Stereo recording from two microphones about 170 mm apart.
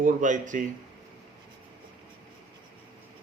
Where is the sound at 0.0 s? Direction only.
45° right (ahead or behind).